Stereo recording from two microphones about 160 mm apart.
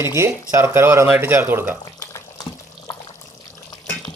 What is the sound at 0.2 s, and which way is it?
Speech, 15° right (ahead or behind).